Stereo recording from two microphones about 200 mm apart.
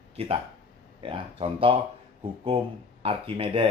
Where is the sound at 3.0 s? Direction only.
30° right (ahead or behind).